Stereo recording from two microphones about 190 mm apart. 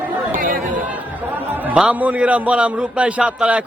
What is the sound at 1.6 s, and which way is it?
A man's voice, 5° right (ahead or behind).